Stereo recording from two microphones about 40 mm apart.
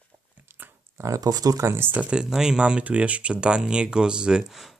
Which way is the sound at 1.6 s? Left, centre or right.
Right.